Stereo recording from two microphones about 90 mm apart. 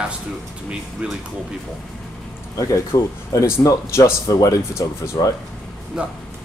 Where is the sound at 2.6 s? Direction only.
40° left (ahead or behind).